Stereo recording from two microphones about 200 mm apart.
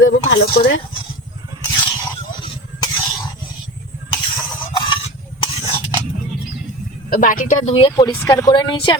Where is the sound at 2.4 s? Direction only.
20° left (ahead or behind).